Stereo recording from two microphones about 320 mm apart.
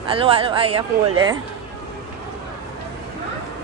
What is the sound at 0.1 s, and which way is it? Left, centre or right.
Speech, centre.